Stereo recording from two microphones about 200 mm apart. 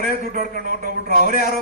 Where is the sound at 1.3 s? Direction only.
50° left (ahead or behind).